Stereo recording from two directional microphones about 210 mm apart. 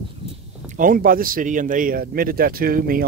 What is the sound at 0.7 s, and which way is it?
Speech, 40° right (ahead or behind).